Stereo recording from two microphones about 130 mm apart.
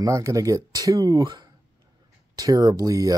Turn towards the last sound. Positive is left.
turn(degrees=-30)  # may be behind; listen again after turning